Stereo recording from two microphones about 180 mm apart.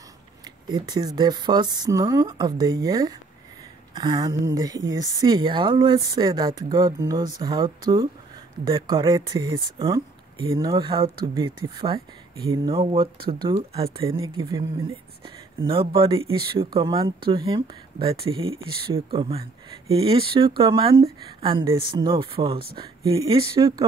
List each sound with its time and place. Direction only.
0.7 s speech: 25° right (ahead or behind)
3.9 s a sound: 25° right (ahead or behind)
4.6 s speech: 20° right (ahead or behind)
14.0 s speech: 15° right (ahead or behind)